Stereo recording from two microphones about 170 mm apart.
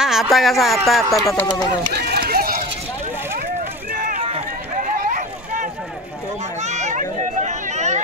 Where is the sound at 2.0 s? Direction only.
65° right (ahead or behind).